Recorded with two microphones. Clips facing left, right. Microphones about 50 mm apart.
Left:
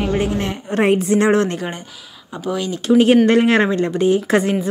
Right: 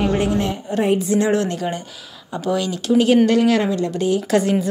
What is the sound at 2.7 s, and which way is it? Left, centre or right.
Speech, left.